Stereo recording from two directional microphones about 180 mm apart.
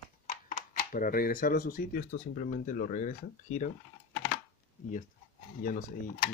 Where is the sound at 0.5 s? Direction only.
45° left (ahead or behind).